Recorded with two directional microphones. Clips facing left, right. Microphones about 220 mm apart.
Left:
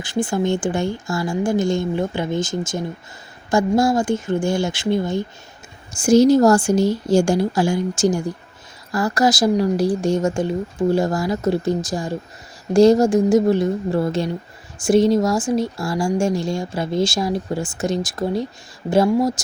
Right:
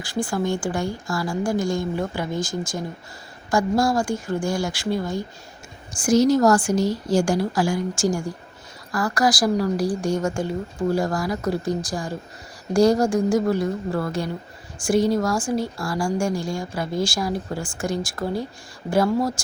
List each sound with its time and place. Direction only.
0.0 s speech: 20° left (ahead or behind)